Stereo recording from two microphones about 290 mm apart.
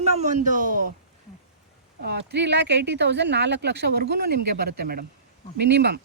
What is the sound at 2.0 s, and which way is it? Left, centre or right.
Speech, right.